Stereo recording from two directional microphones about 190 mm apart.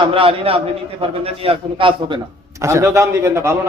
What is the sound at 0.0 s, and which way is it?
A man's voice, 30° right (ahead or behind).